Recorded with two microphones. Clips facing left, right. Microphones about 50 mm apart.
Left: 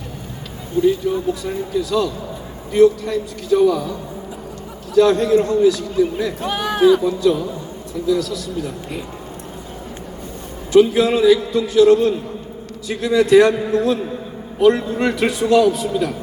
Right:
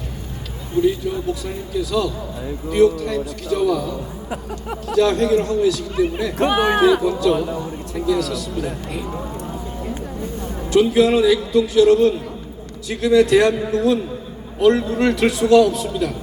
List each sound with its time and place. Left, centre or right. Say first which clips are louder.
0.8 s a man's voice: left 2 dB; centre
4.9 s a man's voice: left 3 dB; centre
6.4 s speech: right 6 dB; right
6.7 s a man's voice: left 1 dB; centre
10.7 s a man's voice: left 2 dB; centre